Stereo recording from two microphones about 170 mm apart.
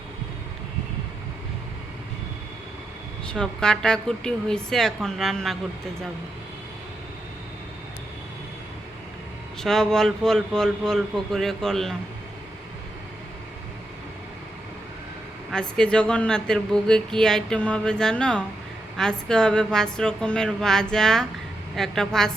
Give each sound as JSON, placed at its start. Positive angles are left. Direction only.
{"t": 3.2, "sound": "speech", "side_deg": 5}
{"t": 9.6, "sound": "speech", "side_deg": 5}
{"t": 15.5, "sound": "speech", "side_deg": 5}